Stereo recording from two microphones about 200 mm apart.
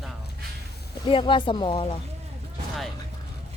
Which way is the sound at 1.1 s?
25° left (ahead or behind).